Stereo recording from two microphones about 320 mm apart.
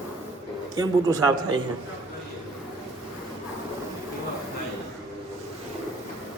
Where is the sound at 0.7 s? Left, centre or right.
Centre.